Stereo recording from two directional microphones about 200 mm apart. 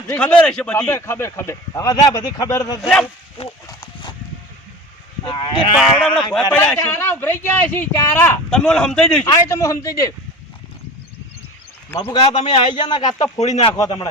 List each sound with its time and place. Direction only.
0.1 s speech: 5° left (ahead or behind)
3.7 s clip-clop: 15° left (ahead or behind)
5.3 s speech: 25° left (ahead or behind)
5.7 s speech: centre (ahead or behind)
9.2 s speech: 15° left (ahead or behind)
11.9 s speech: 20° left (ahead or behind)
13.4 s speech: 30° left (ahead or behind)
13.7 s speech: 15° left (ahead or behind)